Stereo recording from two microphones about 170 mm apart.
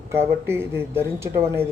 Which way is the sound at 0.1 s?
15° right (ahead or behind).